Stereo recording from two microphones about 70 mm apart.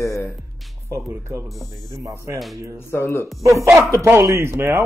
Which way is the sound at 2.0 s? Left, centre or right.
Right.